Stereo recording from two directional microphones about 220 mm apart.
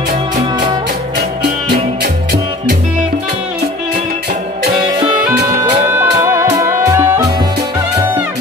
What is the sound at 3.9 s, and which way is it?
Music, 35° right (ahead or behind).